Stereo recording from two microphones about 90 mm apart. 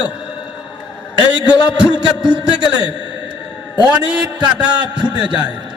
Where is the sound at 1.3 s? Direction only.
10° right (ahead or behind).